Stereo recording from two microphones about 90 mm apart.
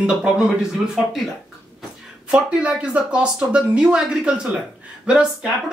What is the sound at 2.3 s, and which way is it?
Speech, 10° right (ahead or behind).